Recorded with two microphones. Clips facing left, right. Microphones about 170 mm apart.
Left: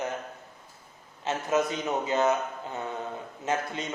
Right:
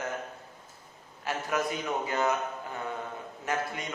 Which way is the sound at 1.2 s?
20° left (ahead or behind).